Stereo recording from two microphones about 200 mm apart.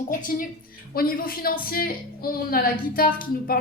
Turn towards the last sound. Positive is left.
turn(degrees=45)  # may be behind; listen again after turning